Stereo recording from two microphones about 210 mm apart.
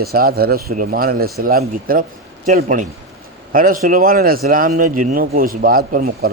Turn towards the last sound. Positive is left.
turn(degrees=-45)  # may be behind; listen again after turning